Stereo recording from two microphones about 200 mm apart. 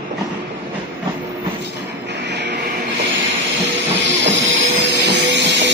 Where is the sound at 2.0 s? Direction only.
60° right (ahead or behind).